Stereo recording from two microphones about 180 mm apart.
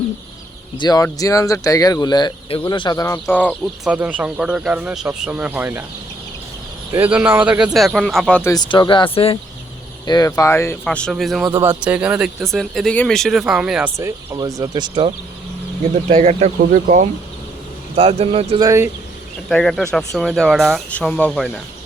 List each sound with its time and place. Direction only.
0.8 s speech: 20° left (ahead or behind)
3.8 s speech: 5° right (ahead or behind)
6.9 s speech: 10° right (ahead or behind)
8.4 s speech: 25° left (ahead or behind)
10.1 s speech: 20° left (ahead or behind); by 13.9 s 5° right (ahead or behind)
13.9 s speech: 15° right (ahead or behind)
16.0 s speech: 40° right (ahead or behind)
17.9 s speech: 35° right (ahead or behind)
18.6 s speech: 15° right (ahead or behind)
19.5 s speech: centre (ahead or behind)